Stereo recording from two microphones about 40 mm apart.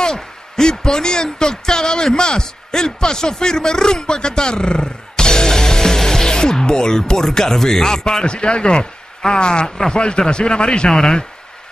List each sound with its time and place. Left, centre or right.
0.0 s speech: centre